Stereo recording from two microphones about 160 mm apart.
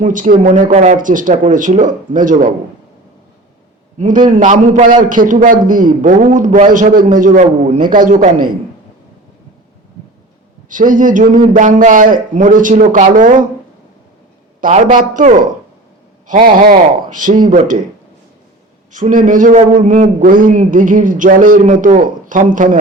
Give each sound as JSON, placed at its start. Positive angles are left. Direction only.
{"t": 0.0, "sound": "a man's voice", "side_deg": -55}
{"t": 3.9, "sound": "a man's voice", "side_deg": -50}
{"t": 10.7, "sound": "a man's voice", "side_deg": -55}
{"t": 14.6, "sound": "a man's voice", "side_deg": -55}
{"t": 18.9, "sound": "a man's voice", "side_deg": -55}